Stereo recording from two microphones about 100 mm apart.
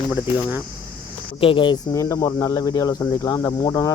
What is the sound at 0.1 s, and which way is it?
Speech, 20° right (ahead or behind).